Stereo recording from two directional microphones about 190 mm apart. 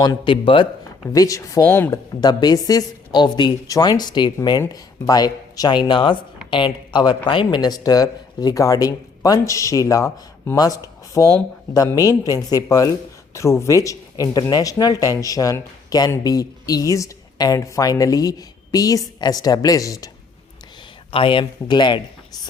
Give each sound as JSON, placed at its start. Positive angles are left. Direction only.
{"t": 0.0, "sound": "speech", "side_deg": 25}
{"t": 21.1, "sound": "speech", "side_deg": 30}